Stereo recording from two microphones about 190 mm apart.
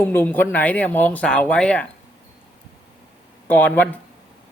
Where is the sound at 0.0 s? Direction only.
10° left (ahead or behind).